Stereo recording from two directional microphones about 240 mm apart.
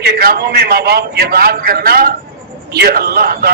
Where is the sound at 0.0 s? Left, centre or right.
Right.